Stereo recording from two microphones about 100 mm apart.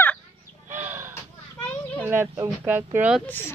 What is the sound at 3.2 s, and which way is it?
Speech, 20° left (ahead or behind).